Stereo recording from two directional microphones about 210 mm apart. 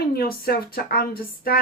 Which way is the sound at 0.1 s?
45° left (ahead or behind).